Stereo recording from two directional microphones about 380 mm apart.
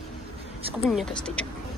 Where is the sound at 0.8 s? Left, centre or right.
Centre.